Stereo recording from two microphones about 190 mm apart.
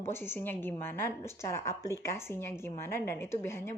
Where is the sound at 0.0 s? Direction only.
10° left (ahead or behind).